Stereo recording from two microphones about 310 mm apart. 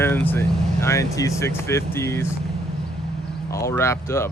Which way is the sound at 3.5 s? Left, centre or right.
Centre.